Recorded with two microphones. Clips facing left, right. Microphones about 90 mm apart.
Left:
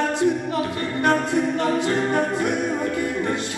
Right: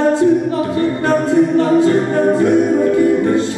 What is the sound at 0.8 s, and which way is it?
A capella, 20° right (ahead or behind).